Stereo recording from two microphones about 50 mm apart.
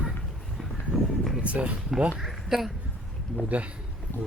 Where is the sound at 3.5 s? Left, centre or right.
Right.